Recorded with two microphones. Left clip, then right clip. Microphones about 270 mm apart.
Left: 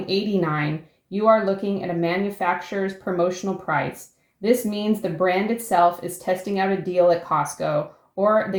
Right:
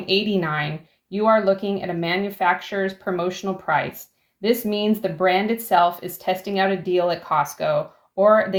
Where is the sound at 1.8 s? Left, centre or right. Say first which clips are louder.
Even; right.